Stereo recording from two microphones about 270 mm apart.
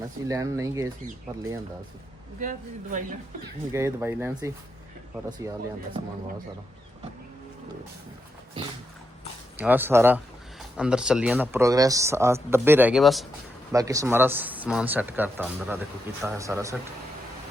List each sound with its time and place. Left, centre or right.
0.3 s speech: centre
2.4 s speech: right
3.7 s speech: centre
9.6 s speech: centre
13.7 s speech: centre